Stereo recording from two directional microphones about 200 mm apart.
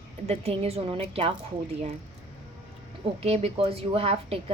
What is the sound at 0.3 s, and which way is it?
Speech, 30° right (ahead or behind).